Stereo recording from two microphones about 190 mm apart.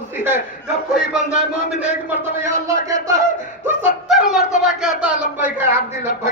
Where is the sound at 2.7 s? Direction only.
15° right (ahead or behind).